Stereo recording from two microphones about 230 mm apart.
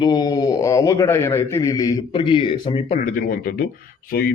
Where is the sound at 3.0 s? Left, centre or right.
Left.